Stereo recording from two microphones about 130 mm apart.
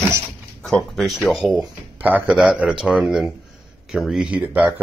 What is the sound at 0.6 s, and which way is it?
Speech, centre (ahead or behind).